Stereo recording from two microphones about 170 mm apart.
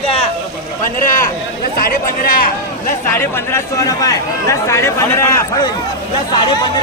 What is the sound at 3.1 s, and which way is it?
A man's voice, 15° left (ahead or behind).